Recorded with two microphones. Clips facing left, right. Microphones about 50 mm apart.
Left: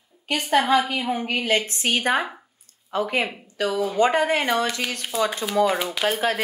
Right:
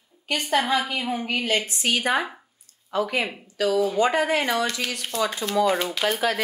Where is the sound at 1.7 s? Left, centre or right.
Left.